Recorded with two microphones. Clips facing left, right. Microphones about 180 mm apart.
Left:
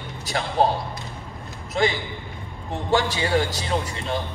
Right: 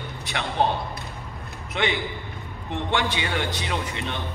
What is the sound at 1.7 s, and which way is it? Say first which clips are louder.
A man's voice: left 3 dB; 35° left (ahead or behind).